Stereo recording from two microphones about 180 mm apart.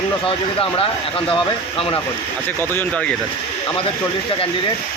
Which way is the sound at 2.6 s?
10° left (ahead or behind).